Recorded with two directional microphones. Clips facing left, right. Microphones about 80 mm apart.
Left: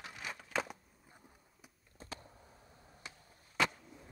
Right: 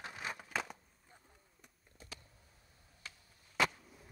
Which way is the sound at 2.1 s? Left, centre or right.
Left.